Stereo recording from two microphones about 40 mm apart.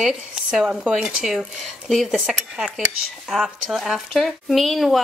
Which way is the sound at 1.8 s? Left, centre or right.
Centre.